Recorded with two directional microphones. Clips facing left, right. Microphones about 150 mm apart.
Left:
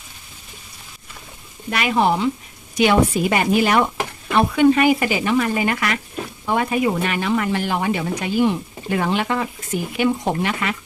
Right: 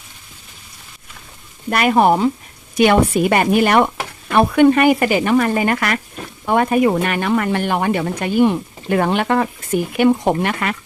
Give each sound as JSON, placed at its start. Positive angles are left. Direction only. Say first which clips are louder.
{"t": 1.7, "sound": "a woman's voice", "louder": "right 5 dB", "side_deg": -50}